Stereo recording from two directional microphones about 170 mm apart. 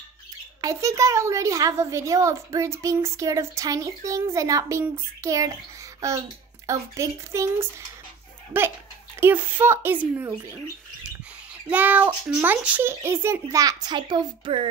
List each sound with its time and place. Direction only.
0.6 s a woman's voice: 20° right (ahead or behind)
11.7 s a woman's voice: 10° right (ahead or behind); by 14.7 s 30° right (ahead or behind)